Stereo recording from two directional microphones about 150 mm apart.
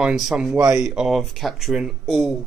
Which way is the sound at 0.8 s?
5° right (ahead or behind).